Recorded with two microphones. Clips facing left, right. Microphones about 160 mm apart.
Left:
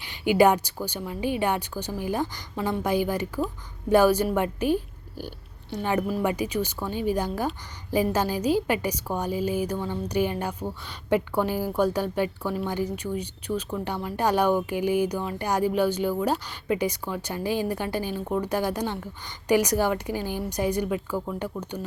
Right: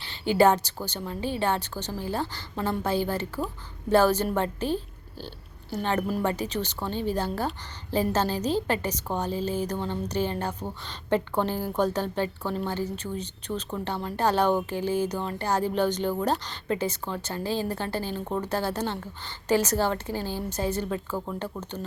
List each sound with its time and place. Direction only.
0.0 s a woman's voice: 15° left (ahead or behind)